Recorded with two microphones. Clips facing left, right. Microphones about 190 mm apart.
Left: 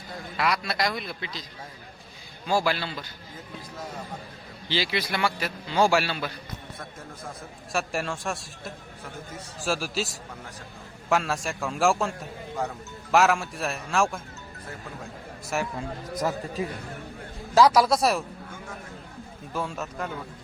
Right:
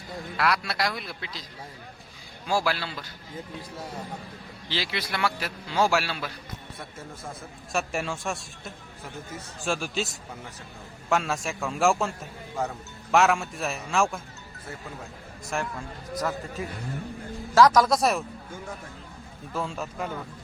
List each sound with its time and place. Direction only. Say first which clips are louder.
0.3 s a man's voice: even; centre (ahead or behind)
2.5 s a man's voice: left 1 dB; 5° right (ahead or behind)
4.7 s a man's voice: left 3 dB; centre (ahead or behind)
7.7 s a man's voice: even; centre (ahead or behind)
15.5 s a man's voice: left 2 dB; 5° left (ahead or behind)
17.5 s a man's voice: even; 10° left (ahead or behind)
19.5 s a man's voice: even; 5° left (ahead or behind)